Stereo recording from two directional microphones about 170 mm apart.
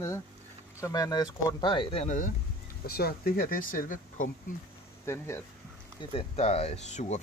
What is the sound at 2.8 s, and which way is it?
Speech, 65° left (ahead or behind).